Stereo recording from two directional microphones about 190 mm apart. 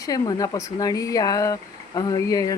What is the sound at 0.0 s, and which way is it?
Speech, 20° left (ahead or behind).